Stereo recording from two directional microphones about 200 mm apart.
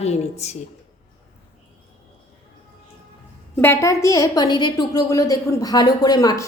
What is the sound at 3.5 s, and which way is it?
A woman's voice, 10° left (ahead or behind).